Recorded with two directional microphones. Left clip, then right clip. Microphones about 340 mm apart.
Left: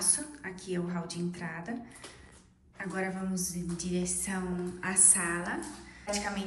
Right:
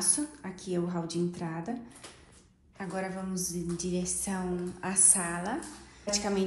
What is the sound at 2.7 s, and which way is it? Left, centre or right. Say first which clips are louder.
A woman's voice: even; centre.